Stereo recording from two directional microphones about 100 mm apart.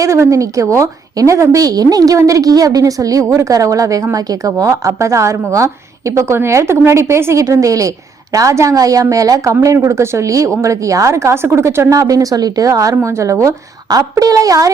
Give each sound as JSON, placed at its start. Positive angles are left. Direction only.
{"t": 0.0, "sound": "a woman's voice", "side_deg": -30}